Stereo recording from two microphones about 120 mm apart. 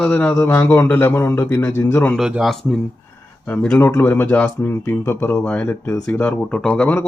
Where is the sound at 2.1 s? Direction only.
5° right (ahead or behind); by 4.5 s 15° left (ahead or behind).